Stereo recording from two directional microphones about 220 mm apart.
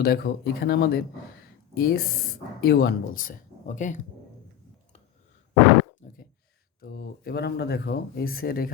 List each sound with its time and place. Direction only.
0.0 s speech: 45° left (ahead or behind)
6.0 s a sound: 35° left (ahead or behind)
6.8 s speech: 45° left (ahead or behind)